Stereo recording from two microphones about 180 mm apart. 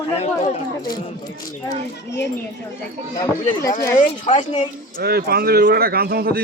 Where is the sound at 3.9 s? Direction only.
45° left (ahead or behind).